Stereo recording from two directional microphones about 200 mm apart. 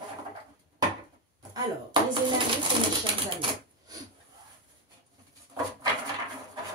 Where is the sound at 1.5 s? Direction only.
20° right (ahead or behind).